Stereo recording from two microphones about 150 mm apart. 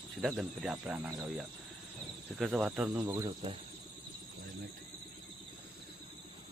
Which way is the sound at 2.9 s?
20° right (ahead or behind).